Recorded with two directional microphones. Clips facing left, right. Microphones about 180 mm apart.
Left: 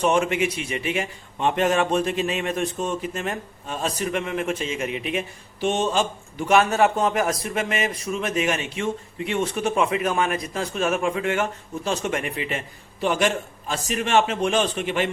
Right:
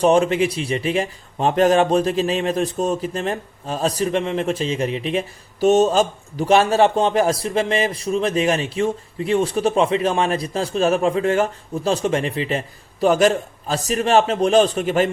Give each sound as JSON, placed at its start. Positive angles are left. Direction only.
{"t": 0.0, "sound": "a man's voice", "side_deg": -35}